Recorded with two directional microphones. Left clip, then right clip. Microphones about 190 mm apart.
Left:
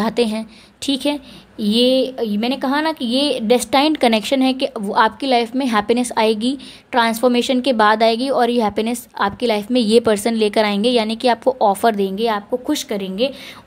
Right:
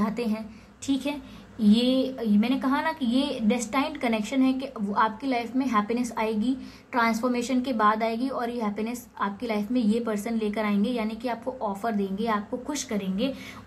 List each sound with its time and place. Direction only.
0.0 s a woman's voice: 40° left (ahead or behind)
1.6 s a woman's voice: 55° left (ahead or behind)
4.6 s a woman's voice: 40° left (ahead or behind)